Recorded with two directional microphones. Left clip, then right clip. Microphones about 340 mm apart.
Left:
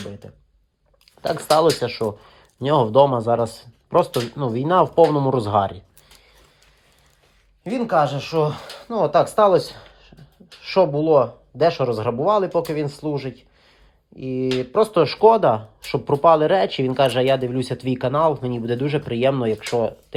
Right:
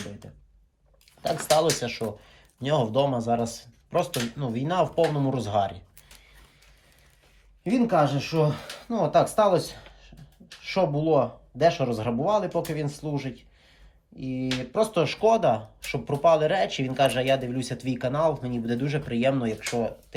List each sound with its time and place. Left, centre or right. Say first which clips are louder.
1.2 s speech: left 6 dB; centre
7.6 s speech: left 4 dB; centre